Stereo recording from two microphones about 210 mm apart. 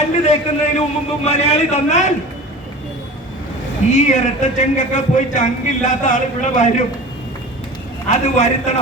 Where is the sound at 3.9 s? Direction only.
35° left (ahead or behind).